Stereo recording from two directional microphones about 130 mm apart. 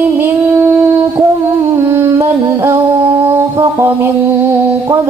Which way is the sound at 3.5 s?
20° right (ahead or behind).